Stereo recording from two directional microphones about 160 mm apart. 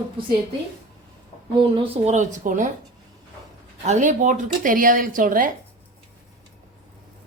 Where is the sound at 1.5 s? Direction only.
30° right (ahead or behind); by 2.6 s 50° right (ahead or behind).